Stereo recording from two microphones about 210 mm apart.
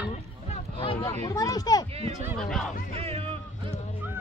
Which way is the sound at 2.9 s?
30° right (ahead or behind).